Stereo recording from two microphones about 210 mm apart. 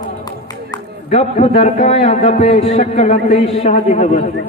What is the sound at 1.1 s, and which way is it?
A man's voice, 35° left (ahead or behind).